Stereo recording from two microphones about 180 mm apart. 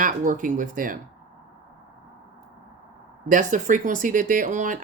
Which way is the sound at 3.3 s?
45° right (ahead or behind).